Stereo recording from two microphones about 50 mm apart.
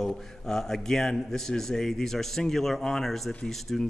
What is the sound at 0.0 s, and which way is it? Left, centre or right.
A man's voice, centre.